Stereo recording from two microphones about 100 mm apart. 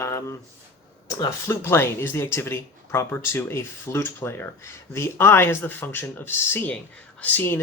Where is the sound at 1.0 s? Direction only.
30° left (ahead or behind).